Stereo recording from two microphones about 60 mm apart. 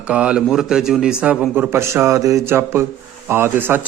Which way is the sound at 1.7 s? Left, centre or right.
Right.